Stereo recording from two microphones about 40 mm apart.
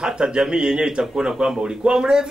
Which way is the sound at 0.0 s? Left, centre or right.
Centre.